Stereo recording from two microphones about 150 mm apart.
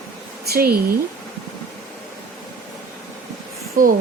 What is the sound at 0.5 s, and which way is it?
Speech, 90° right.